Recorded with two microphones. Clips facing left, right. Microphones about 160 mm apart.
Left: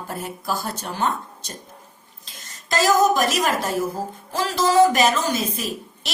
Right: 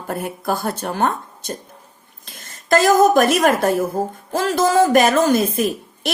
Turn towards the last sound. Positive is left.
turn(degrees=-55)  # may be behind; listen again after turning